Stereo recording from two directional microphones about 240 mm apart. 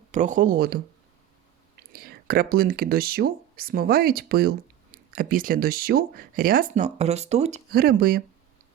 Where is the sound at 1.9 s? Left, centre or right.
Right.